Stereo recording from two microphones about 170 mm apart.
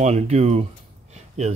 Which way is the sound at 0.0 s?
40° right (ahead or behind).